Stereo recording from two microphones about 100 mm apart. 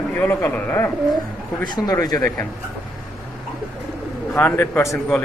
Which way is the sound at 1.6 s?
45° left (ahead or behind).